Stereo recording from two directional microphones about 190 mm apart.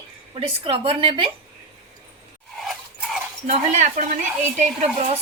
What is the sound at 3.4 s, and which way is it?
Speech, 45° right (ahead or behind).